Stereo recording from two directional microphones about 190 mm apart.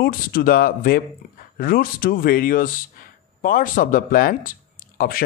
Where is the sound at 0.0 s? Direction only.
50° left (ahead or behind).